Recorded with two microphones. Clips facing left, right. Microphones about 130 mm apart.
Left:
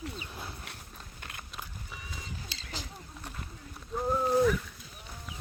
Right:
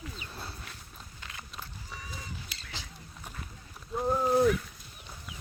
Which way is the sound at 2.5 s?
30° left (ahead or behind).